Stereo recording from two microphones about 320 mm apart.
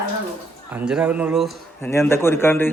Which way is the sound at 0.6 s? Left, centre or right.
Centre.